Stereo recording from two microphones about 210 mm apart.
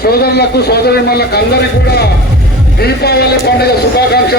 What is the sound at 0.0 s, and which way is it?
A man's voice, 50° left (ahead or behind).